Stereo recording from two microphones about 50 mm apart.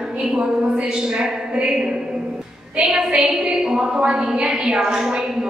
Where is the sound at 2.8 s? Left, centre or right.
Centre.